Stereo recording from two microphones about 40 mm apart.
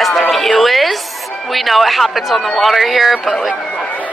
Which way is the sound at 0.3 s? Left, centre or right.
Centre.